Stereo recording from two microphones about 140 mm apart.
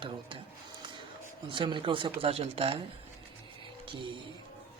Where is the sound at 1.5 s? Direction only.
35° right (ahead or behind).